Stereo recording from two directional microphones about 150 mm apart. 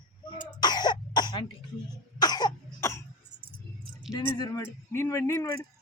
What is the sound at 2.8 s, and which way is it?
Throat clearing, 20° left (ahead or behind).